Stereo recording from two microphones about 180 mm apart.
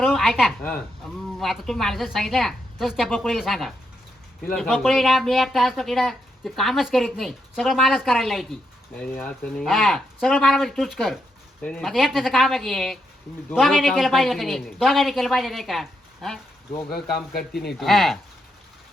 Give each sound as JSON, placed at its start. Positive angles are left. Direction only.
{"t": 0.0, "sound": "speech", "side_deg": 0}
{"t": 16.9, "sound": "speech", "side_deg": 60}
{"t": 17.7, "sound": "speech", "side_deg": 0}